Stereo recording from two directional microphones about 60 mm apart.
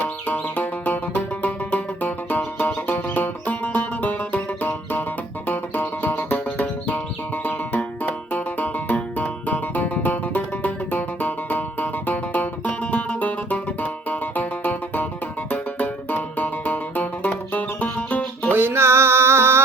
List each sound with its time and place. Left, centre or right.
0.3 s music: left
18.5 s music: right